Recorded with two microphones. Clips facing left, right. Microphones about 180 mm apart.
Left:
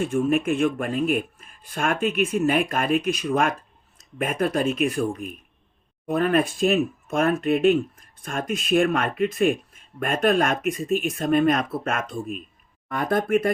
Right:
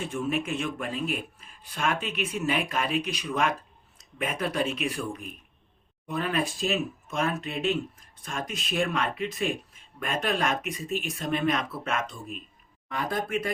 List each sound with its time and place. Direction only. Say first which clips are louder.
0.0 s speech: left 8 dB; 50° left (ahead or behind)